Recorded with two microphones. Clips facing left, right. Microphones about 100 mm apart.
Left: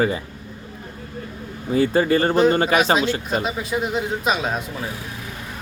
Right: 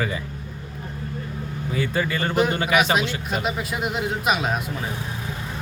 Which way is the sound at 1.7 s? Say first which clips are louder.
Left 8 dB; 35° left (ahead or behind).